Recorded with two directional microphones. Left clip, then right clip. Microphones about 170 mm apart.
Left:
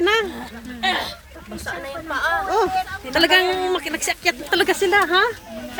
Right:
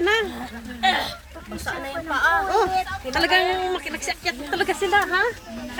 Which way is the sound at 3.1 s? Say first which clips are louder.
Left 3 dB; 45° left (ahead or behind).